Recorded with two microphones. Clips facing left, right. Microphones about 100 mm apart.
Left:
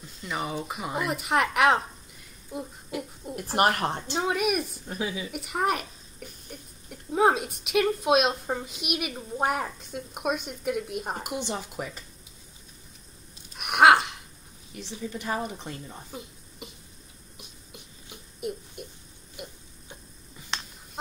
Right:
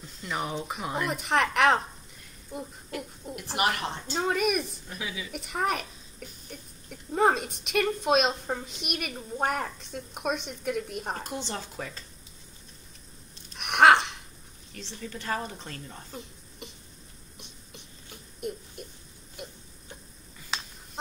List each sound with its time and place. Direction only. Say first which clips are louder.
0.2 s speech: left 1 dB; centre (ahead or behind)
3.5 s speech: left 5 dB; 45° left (ahead or behind)
4.1 s speech: right 1 dB; 5° left (ahead or behind)
4.8 s a woman's voice: left 5 dB; 35° left (ahead or behind)
5.3 s speech: even; 5° left (ahead or behind)
11.1 s speech: left 3 dB; 15° left (ahead or behind)
13.6 s a sound: left 1 dB; 5° left (ahead or behind)
14.7 s speech: left 4 dB; 10° left (ahead or behind)
17.4 s a sound: left 1 dB; 5° left (ahead or behind)
20.5 s a sound: even; 5° right (ahead or behind)